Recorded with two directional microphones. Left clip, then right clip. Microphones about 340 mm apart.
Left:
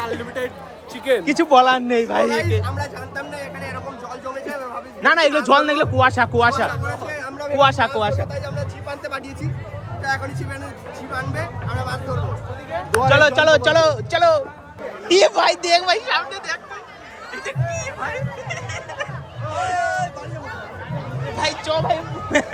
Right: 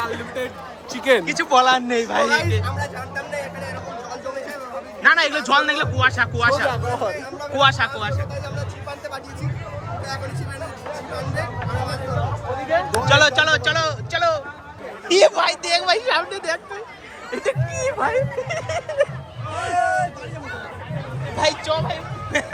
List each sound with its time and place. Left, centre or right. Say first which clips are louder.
0.0 s speech: even; centre
1.2 s speech: left 3 dB; centre
5.0 s a man's voice: left 1 dB; centre
8.4 s music: left 2 dB; left
12.9 s a man's voice: left 3 dB; centre
16.0 s speech: right 1 dB; centre
19.8 s a sound: right 6 dB; centre
21.3 s a man's voice: right 2 dB; centre
21.8 s speech: left 5 dB; left